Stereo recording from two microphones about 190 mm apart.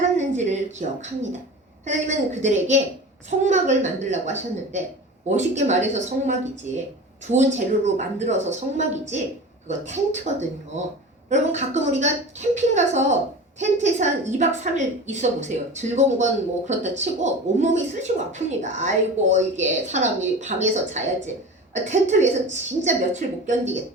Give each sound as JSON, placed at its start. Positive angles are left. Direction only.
{"t": 0.2, "sound": "a woman's voice", "side_deg": -35}
{"t": 9.6, "sound": "a woman's voice", "side_deg": -40}
{"t": 11.3, "sound": "a woman's voice", "side_deg": -40}